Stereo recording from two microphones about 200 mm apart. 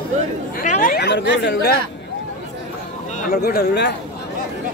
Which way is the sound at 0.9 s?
60° left (ahead or behind).